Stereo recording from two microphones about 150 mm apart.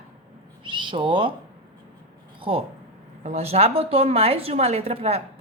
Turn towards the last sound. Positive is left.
turn(degrees=-45)  # may be behind; listen again after turning